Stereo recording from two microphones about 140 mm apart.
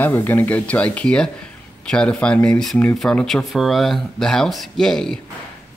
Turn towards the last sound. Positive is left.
turn(degrees=5)  # may be behind; listen again after turning